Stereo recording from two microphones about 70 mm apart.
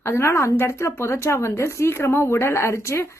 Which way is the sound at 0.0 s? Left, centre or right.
Left.